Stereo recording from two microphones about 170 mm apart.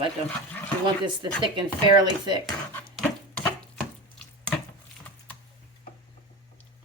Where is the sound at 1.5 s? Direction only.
25° right (ahead or behind).